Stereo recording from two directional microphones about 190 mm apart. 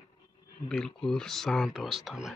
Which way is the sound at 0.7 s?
5° left (ahead or behind).